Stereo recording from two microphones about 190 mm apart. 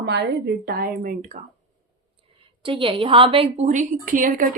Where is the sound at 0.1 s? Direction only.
60° right (ahead or behind); by 1.4 s 40° right (ahead or behind).